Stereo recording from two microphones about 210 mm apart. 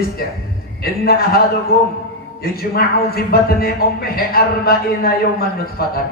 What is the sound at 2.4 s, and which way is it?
A man's voice, 45° left (ahead or behind).